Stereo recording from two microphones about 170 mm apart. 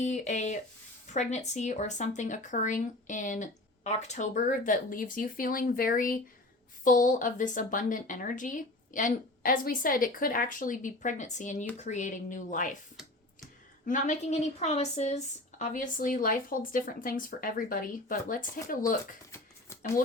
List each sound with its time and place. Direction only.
0.0 s speech: 45° left (ahead or behind)
13.8 s speech: 50° left (ahead or behind)
19.3 s a sound: 15° left (ahead or behind)